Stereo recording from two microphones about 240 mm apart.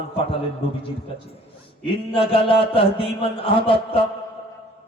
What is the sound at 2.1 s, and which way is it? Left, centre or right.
Mantra, left.